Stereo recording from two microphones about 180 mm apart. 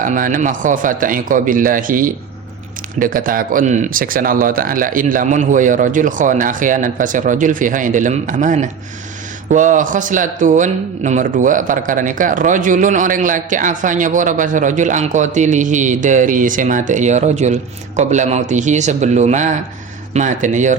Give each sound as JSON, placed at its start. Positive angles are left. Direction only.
{"t": 0.0, "sound": "speech", "side_deg": -50}